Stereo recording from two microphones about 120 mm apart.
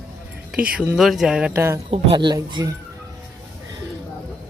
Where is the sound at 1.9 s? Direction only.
45° right (ahead or behind).